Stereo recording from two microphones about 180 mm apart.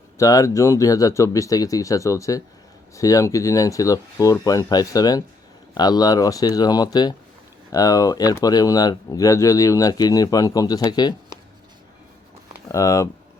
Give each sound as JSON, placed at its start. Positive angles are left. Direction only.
{"t": 0.2, "sound": "speech", "side_deg": 20}
{"t": 12.6, "sound": "speech", "side_deg": 20}